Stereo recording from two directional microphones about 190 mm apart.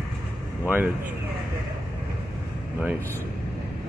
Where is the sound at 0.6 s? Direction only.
10° right (ahead or behind).